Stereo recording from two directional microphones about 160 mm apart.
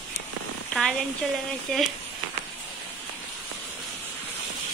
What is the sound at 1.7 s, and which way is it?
Speech, 5° left (ahead or behind).